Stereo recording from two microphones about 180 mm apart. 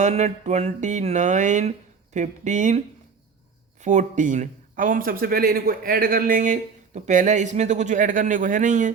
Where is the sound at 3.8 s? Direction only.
40° right (ahead or behind).